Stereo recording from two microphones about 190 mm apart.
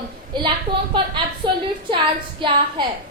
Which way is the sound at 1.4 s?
25° right (ahead or behind).